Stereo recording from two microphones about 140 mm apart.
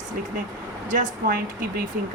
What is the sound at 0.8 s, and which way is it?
Speech, 80° right.